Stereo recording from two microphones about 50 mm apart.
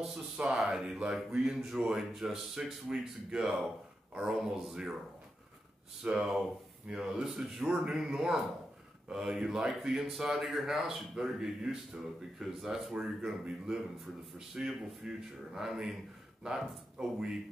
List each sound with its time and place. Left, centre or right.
0.6 s speech: centre
0.8 s speech: centre
6.1 s speech: centre